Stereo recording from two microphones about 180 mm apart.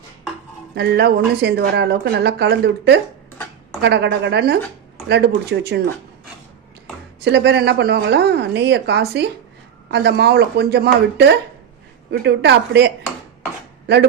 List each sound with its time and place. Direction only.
0.8 s speech: 65° right (ahead or behind)
7.2 s speech: 70° right (ahead or behind)